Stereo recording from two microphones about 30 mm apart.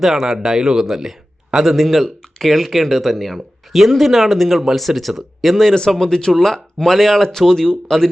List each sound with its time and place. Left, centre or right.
0.0 s a man's voice: centre
2.0 s speech: centre
5.5 s speech: centre